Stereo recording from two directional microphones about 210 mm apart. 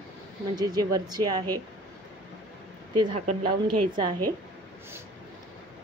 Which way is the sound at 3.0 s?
30° right (ahead or behind).